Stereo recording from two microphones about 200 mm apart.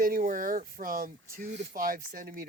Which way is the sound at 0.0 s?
45° right (ahead or behind).